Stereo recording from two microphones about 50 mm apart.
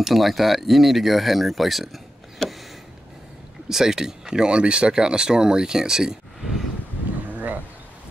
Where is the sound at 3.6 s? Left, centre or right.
Centre.